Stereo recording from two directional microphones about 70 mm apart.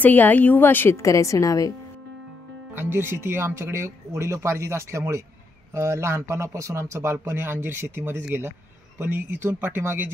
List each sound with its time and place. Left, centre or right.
0.0 s a woman's voice: left
0.9 s a woman's voice: left
2.7 s speech: right